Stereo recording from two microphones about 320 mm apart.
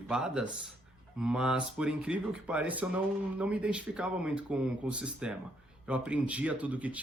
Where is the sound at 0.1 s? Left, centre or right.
Centre.